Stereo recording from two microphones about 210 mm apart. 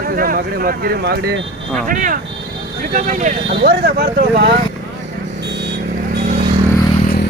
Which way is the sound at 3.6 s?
50° right (ahead or behind).